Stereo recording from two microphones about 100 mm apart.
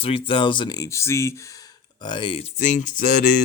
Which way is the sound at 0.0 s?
60° left (ahead or behind).